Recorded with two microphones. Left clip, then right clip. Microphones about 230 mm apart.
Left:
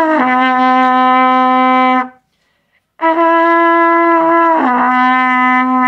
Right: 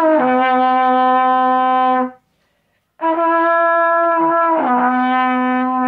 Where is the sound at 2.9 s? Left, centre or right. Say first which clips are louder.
Left 5 dB; left.